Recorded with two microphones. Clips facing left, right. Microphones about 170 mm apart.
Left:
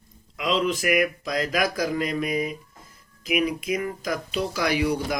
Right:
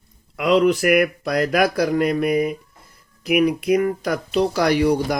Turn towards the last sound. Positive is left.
turn(degrees=-60)  # may be behind; listen again after turning